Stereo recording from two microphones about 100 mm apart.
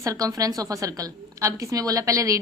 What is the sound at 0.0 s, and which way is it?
A woman's voice, 35° right (ahead or behind).